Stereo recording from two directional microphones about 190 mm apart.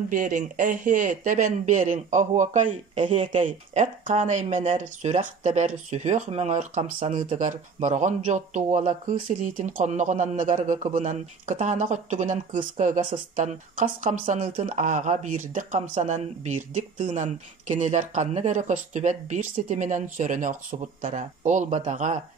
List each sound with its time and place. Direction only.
0.1 s speech: 45° right (ahead or behind)
3.0 s speech: 30° right (ahead or behind)
3.4 s speech: 40° right (ahead or behind)